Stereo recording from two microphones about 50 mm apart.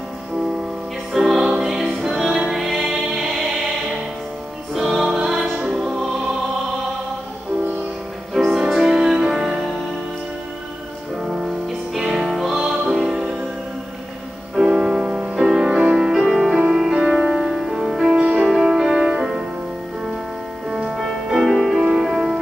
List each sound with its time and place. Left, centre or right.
1.1 s music: centre
4.7 s music: centre
8.5 s music: centre
11.2 s music: centre
14.5 s music: centre
18.1 s music: centre
18.4 s music: centre
20.7 s music: centre